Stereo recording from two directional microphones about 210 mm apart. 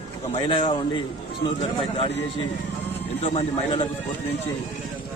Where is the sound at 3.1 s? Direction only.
30° left (ahead or behind).